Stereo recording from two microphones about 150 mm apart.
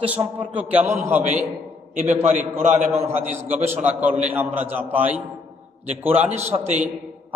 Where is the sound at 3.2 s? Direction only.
50° right (ahead or behind).